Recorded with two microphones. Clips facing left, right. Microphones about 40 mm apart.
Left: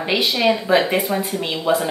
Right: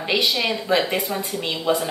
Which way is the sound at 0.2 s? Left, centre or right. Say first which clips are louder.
Left 4 dB; left.